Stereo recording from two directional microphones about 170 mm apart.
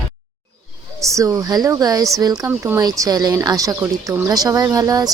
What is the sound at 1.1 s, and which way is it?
Speech, 20° right (ahead or behind).